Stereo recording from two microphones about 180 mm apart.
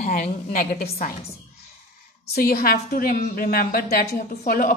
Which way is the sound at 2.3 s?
60° left (ahead or behind).